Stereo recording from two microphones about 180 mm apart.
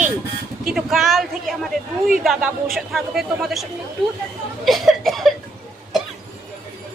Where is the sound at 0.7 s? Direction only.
Centre (ahead or behind).